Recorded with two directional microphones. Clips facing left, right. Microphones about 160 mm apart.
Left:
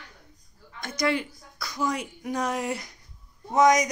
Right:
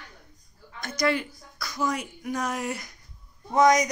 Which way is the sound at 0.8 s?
20° left (ahead or behind).